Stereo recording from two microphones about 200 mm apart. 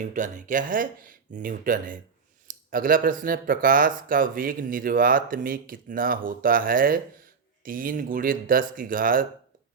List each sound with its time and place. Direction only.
0.0 s speech: 40° right (ahead or behind)